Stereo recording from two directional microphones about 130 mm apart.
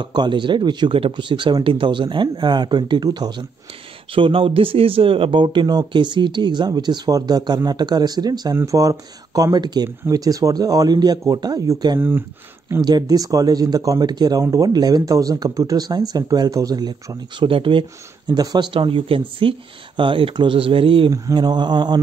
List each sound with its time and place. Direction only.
0.0 s speech: 35° right (ahead or behind)
12.0 s speech: 15° right (ahead or behind)
12.8 s speech: 30° right (ahead or behind)
21.1 s speech: 30° right (ahead or behind)